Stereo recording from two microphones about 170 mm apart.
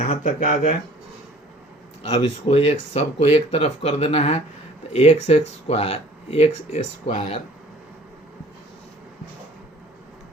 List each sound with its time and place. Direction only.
0.0 s speech: 45° left (ahead or behind)
2.2 s speech: 35° left (ahead or behind)